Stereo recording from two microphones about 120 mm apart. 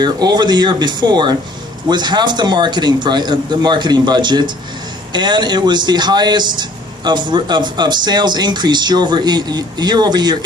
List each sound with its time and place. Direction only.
0.0 s a man's voice: 35° right (ahead or behind)